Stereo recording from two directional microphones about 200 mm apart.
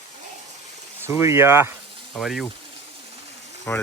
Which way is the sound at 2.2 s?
Centre (ahead or behind).